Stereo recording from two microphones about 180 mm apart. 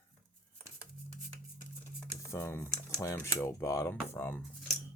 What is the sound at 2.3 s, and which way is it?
Speech, 15° left (ahead or behind).